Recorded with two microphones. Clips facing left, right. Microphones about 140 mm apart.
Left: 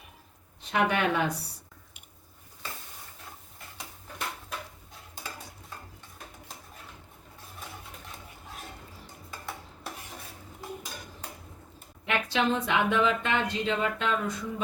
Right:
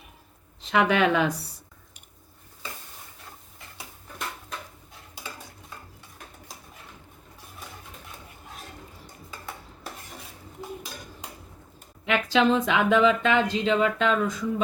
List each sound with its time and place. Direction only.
0.6 s speech: 90° right
12.0 s speech: 90° right